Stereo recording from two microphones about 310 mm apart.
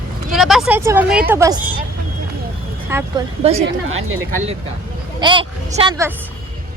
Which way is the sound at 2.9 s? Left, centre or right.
Centre.